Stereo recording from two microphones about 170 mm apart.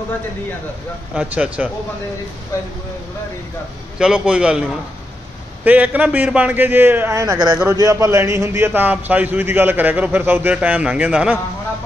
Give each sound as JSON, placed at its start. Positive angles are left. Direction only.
{"t": 1.1, "sound": "a man's voice", "side_deg": -5}
{"t": 4.0, "sound": "a man's voice", "side_deg": -5}